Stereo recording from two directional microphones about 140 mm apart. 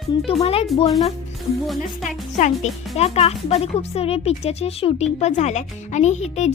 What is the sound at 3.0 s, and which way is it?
Speech, 50° left (ahead or behind).